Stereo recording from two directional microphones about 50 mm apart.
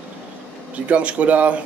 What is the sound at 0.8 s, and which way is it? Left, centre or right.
Speech, right.